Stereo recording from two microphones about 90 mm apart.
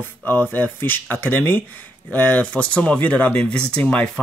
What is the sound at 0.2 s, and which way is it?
Speech, 20° left (ahead or behind).